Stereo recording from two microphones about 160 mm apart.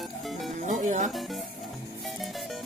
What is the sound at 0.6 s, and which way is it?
Speech, 50° right (ahead or behind).